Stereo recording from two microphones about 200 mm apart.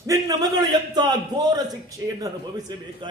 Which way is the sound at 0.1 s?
20° right (ahead or behind).